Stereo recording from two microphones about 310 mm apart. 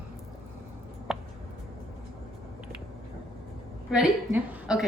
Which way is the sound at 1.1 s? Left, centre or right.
Centre.